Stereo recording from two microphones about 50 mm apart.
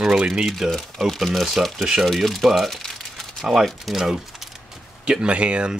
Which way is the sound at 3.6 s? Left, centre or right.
Centre.